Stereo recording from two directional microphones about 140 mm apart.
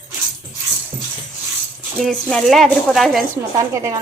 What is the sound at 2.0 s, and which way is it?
A woman's voice, 5° left (ahead or behind).